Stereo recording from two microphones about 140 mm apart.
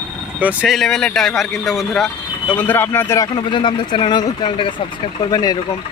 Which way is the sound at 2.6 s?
15° left (ahead or behind).